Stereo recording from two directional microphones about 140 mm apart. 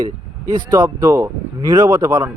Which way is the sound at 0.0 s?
30° right (ahead or behind).